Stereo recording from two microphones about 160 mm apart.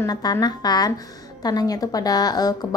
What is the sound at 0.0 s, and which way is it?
A woman's voice, 25° left (ahead or behind).